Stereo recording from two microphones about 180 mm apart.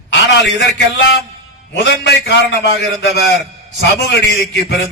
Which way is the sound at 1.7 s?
70° left (ahead or behind).